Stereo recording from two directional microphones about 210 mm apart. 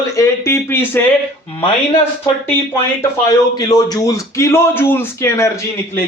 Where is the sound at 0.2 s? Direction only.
10° left (ahead or behind).